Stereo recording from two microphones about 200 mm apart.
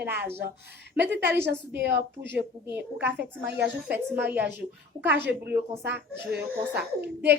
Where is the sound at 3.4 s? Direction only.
55° right (ahead or behind).